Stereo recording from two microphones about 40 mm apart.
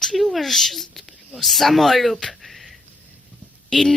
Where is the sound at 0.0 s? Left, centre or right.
Centre.